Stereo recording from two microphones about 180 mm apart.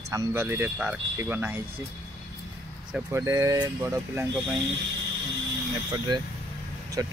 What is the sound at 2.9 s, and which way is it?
Speech, 15° right (ahead or behind).